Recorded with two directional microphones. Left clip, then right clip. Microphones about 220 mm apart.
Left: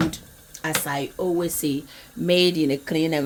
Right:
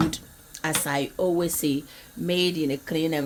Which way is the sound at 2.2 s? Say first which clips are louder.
Left 5 dB; 20° left (ahead or behind).